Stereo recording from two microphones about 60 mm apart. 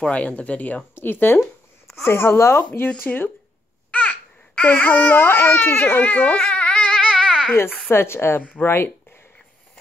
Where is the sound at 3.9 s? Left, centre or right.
Left.